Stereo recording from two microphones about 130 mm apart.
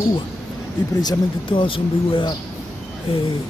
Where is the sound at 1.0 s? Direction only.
35° left (ahead or behind).